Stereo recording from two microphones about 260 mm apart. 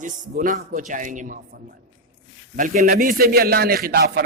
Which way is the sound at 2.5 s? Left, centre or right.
Right.